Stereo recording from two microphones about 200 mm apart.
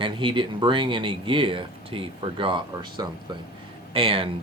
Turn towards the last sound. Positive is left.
turn(degrees=-25)  # may be behind; listen again after turning